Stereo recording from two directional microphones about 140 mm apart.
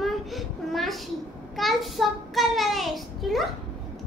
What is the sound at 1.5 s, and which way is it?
A child's voice, centre (ahead or behind).